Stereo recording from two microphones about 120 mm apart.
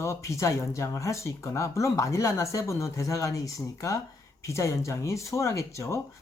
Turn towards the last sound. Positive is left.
turn(degrees=25)  # may be behind; listen again after turning